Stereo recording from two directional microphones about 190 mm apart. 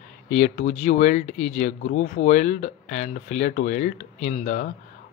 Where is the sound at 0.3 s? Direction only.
35° left (ahead or behind).